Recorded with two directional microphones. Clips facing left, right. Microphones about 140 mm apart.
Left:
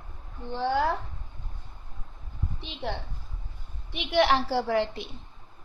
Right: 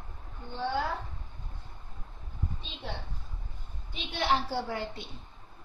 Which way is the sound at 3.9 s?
75° left (ahead or behind).